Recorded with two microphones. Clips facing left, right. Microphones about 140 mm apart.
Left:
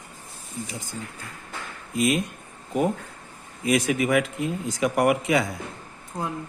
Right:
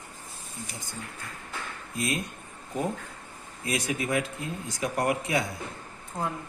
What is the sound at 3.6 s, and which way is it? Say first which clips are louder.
A man's voice: left 8 dB; 90° left.